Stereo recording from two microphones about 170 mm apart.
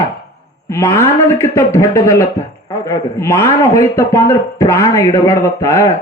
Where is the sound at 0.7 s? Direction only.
15° left (ahead or behind).